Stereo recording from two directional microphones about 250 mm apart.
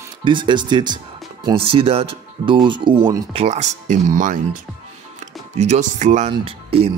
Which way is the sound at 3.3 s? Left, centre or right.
Right.